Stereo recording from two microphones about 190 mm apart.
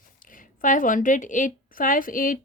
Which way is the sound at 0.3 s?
45° left (ahead or behind).